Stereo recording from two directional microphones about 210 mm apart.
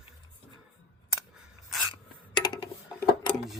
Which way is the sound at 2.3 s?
20° left (ahead or behind).